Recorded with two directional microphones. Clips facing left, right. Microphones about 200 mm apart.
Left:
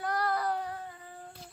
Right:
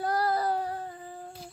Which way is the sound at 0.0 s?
30° right (ahead or behind).